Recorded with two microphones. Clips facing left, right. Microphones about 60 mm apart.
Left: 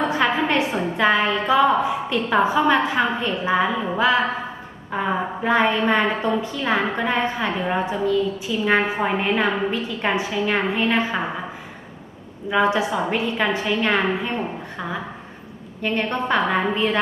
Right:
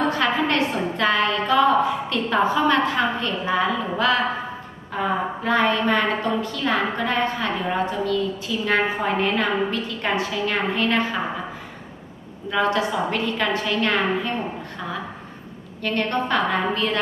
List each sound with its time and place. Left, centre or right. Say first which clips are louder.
0.1 s a woman's voice: left 1 dB; centre
12.5 s a woman's voice: left 2 dB; centre